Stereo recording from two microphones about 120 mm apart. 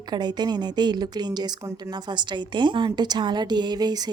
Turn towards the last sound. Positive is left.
turn(degrees=-35)  # may be behind; listen again after turning